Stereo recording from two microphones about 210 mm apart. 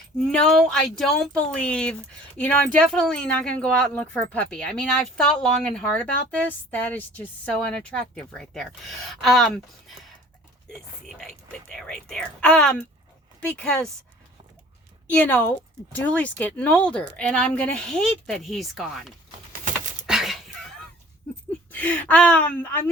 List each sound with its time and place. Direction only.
0.2 s speech: centre (ahead or behind)
10.7 s speech: centre (ahead or behind)
15.1 s speech: 10° left (ahead or behind)
19.6 s a sound: 40° right (ahead or behind)
20.1 s a sound: centre (ahead or behind)
21.7 s speech: 10° left (ahead or behind)